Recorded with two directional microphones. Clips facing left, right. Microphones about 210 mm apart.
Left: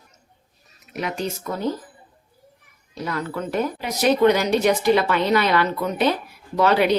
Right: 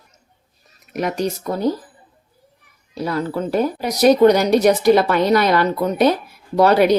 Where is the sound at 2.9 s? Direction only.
30° right (ahead or behind).